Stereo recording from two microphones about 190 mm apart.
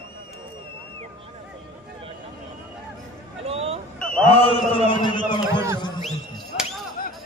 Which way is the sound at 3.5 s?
30° right (ahead or behind).